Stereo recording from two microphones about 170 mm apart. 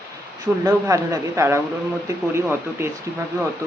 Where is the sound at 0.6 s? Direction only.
20° right (ahead or behind).